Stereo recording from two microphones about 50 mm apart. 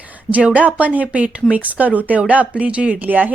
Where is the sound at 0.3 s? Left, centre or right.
Right.